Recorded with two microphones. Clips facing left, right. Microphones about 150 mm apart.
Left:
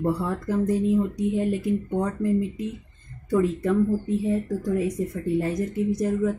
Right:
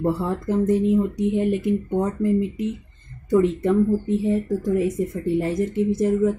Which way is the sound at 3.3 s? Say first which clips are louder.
Right 4 dB; 20° right (ahead or behind).